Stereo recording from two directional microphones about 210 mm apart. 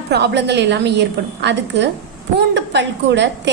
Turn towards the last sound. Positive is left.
turn(degrees=-55)  # may be behind; listen again after turning